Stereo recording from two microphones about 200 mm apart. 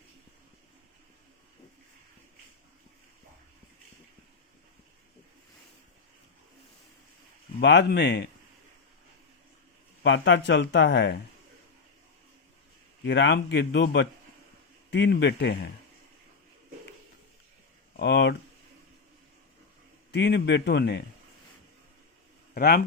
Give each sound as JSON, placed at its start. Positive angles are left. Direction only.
{"t": 7.6, "sound": "speech", "side_deg": 60}
{"t": 10.0, "sound": "speech", "side_deg": 65}
{"t": 13.0, "sound": "speech", "side_deg": 60}
{"t": 17.9, "sound": "speech", "side_deg": 60}
{"t": 20.1, "sound": "speech", "side_deg": 60}
{"t": 22.5, "sound": "speech", "side_deg": 50}